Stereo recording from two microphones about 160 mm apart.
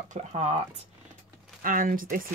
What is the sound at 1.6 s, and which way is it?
Speech, 60° right (ahead or behind).